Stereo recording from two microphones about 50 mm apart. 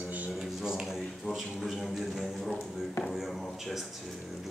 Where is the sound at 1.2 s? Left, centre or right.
Centre.